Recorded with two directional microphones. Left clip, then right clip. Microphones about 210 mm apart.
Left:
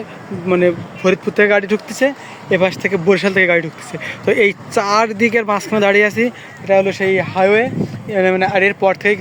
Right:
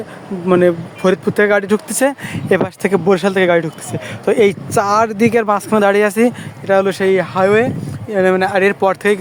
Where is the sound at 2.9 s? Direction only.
15° right (ahead or behind).